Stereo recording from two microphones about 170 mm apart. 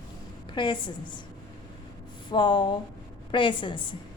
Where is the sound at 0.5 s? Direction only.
30° left (ahead or behind).